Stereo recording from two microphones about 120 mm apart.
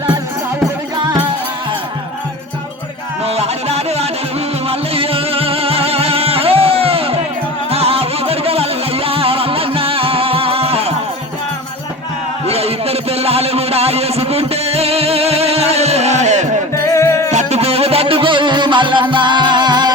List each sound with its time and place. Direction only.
3.2 s music: 60° right (ahead or behind)
12.5 s a sound: 55° right (ahead or behind); by 16.6 s 75° right (ahead or behind)
16.8 s music: 25° left (ahead or behind)
17.3 s music: 60° right (ahead or behind); by 19.9 s 35° right (ahead or behind)